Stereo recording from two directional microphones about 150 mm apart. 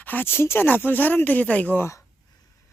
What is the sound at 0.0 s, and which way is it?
Speech, 10° left (ahead or behind).